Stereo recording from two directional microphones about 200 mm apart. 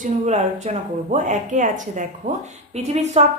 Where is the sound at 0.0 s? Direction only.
35° right (ahead or behind).